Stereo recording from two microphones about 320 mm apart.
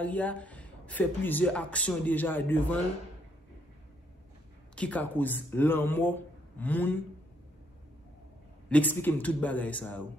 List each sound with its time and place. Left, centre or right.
0.0 s speech: centre
4.7 s speech: centre
8.6 s speech: centre